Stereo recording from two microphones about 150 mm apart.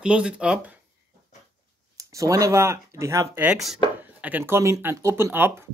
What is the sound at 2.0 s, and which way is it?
Speech, 20° right (ahead or behind).